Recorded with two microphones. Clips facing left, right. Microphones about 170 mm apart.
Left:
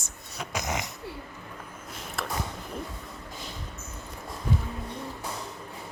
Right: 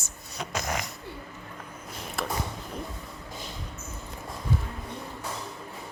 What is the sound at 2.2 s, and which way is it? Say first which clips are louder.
Speech: right 2 dB; centre (ahead or behind).